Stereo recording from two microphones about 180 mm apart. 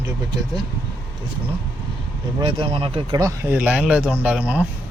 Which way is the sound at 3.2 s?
15° right (ahead or behind).